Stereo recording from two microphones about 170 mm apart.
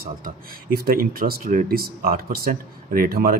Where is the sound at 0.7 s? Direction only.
60° right (ahead or behind).